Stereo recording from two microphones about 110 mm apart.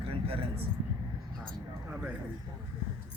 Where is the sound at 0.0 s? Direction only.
55° right (ahead or behind).